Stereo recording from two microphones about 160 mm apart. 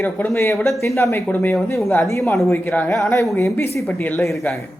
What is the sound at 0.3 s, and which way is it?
Speech, 15° left (ahead or behind).